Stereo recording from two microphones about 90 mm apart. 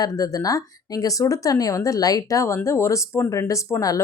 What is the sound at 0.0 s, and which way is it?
Speech, 40° left (ahead or behind).